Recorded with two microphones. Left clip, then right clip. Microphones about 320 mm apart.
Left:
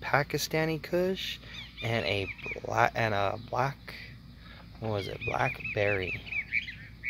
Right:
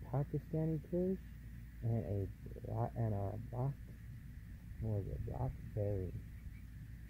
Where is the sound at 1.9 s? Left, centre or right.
Left.